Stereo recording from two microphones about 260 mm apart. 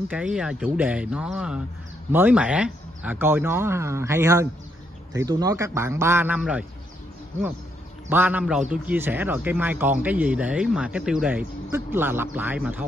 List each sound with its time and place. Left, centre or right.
0.1 s a man's voice: centre
8.1 s a man's voice: centre